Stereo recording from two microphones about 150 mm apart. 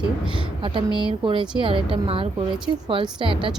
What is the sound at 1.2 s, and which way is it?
A woman's voice, 35° right (ahead or behind).